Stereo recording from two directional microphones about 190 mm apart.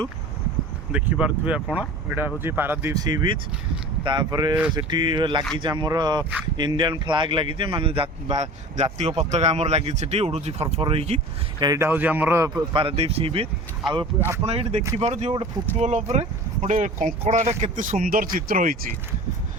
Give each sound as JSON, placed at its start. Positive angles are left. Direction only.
{"t": 0.9, "sound": "speech", "side_deg": -5}
{"t": 11.6, "sound": "speech", "side_deg": -15}
{"t": 12.7, "sound": "speech", "side_deg": -30}